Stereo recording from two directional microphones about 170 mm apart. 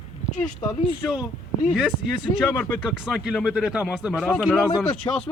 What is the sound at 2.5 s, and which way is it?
Speech, 10° left (ahead or behind).